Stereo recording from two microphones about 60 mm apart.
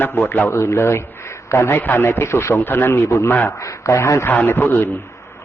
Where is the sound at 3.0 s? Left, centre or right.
Left.